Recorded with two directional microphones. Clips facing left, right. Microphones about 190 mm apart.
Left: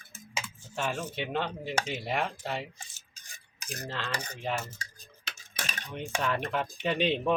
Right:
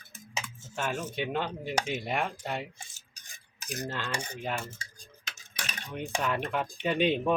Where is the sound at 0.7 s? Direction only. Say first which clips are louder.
Even; 5° right (ahead or behind).